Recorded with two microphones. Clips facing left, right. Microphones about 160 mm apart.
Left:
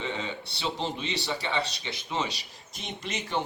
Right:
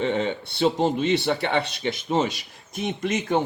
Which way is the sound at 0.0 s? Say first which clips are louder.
Right 9 dB; 55° right (ahead or behind).